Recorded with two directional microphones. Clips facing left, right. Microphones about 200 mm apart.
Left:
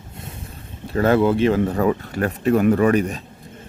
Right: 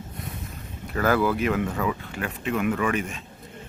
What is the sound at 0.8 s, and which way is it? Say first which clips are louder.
Speech: left 6 dB; 30° left (ahead or behind).